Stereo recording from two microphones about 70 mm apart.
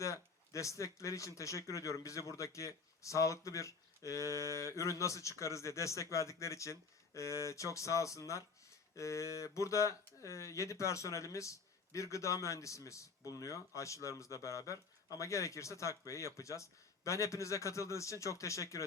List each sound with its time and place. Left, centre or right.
0.0 s speech: left
4.2 s a sound: right
4.5 s speech: left